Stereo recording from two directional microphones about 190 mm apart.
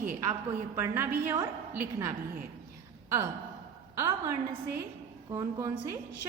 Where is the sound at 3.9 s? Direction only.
15° right (ahead or behind).